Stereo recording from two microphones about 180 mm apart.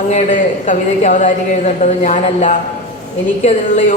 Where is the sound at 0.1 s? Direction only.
40° left (ahead or behind).